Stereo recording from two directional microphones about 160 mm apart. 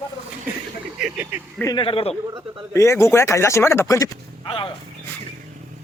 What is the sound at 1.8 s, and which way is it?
Speech, 35° left (ahead or behind).